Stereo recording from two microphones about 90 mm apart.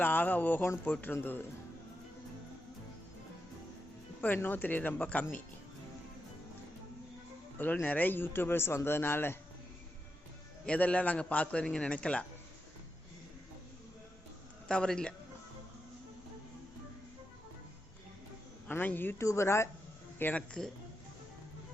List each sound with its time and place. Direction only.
0.0 s a man's voice: 20° left (ahead or behind)
4.4 s a man's voice: 20° left (ahead or behind)
7.6 s a man's voice: 20° left (ahead or behind)
10.7 s a man's voice: 15° left (ahead or behind)
14.7 s a man's voice: 10° left (ahead or behind)
18.7 s a man's voice: 20° left (ahead or behind)